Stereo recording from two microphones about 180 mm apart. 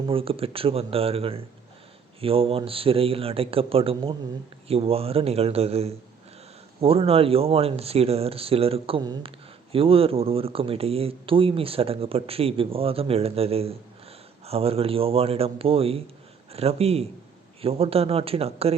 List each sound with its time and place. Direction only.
0.0 s a man's voice: 30° right (ahead or behind)